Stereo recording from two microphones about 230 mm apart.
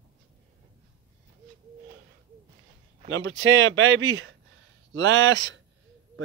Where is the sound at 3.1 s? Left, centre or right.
Right.